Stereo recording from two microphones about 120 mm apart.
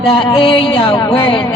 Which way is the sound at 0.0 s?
50° left (ahead or behind).